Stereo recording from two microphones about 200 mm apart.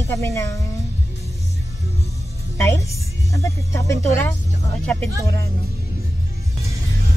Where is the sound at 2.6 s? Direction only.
15° left (ahead or behind).